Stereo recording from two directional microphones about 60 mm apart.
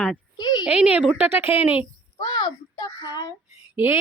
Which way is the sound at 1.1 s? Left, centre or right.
Right.